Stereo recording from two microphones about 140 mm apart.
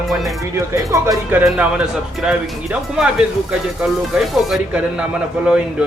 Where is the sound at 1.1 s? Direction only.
5° right (ahead or behind).